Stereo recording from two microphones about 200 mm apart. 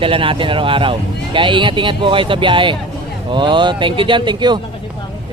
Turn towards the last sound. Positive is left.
turn(degrees=-25)  # may be behind; listen again after turning